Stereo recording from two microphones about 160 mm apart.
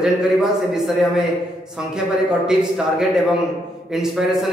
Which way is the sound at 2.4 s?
5° right (ahead or behind).